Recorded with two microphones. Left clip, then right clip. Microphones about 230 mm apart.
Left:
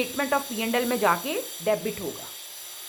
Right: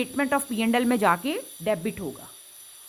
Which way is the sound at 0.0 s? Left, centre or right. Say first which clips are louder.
Even; right.